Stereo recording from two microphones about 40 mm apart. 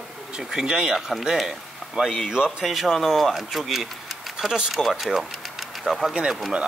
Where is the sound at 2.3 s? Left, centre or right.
Centre.